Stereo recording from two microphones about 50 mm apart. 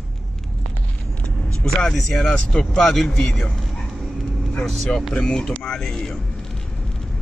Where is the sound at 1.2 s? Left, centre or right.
Left.